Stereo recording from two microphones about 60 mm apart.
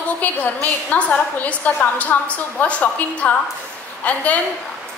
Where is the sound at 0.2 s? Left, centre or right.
Left.